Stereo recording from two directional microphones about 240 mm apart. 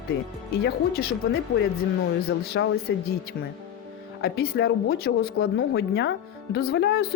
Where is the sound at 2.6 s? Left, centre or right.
Left.